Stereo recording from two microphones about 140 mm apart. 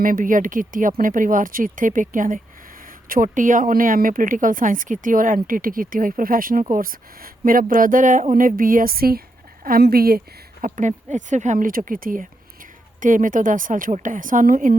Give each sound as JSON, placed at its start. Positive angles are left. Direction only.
{"t": 0.0, "sound": "speech", "side_deg": -80}
{"t": 7.7, "sound": "speech", "side_deg": -75}
{"t": 10.6, "sound": "speech", "side_deg": -65}
{"t": 13.0, "sound": "speech", "side_deg": -70}